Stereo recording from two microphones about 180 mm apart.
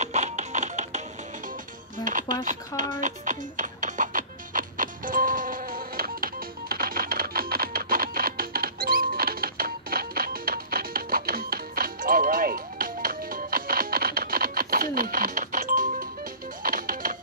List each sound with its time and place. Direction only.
0.0 s music: 40° right (ahead or behind)
2.0 s music: 45° right (ahead or behind)